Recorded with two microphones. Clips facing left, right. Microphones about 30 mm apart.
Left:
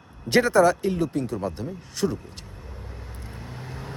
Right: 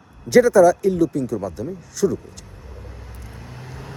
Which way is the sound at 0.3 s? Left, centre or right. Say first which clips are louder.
Right 6 dB; left.